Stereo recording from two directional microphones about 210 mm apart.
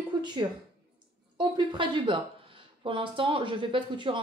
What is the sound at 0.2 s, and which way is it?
A woman's voice, 20° right (ahead or behind).